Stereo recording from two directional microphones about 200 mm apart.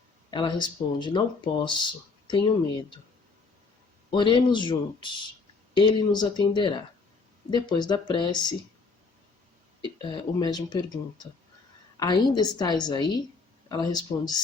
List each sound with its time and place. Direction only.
0.3 s speech: 25° left (ahead or behind)
4.1 s speech: 25° left (ahead or behind)
10.0 s speech: 20° left (ahead or behind)